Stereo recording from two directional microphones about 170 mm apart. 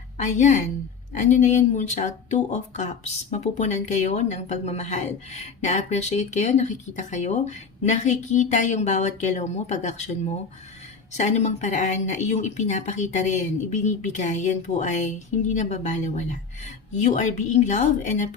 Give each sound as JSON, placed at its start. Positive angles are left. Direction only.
{"t": 0.2, "sound": "speech", "side_deg": 45}